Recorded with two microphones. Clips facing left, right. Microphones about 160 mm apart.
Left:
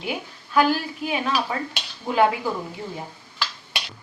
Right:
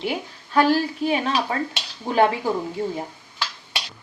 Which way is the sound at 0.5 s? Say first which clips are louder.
Right 2 dB; 35° right (ahead or behind).